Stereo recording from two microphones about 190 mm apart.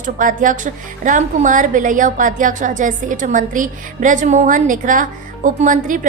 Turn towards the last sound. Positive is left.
turn(degrees=-45)  # may be behind; listen again after turning